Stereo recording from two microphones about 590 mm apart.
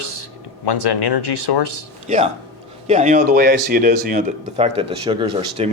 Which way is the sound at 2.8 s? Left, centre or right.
Centre.